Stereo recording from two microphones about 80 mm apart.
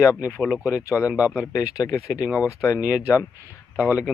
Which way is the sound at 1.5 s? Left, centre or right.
Left.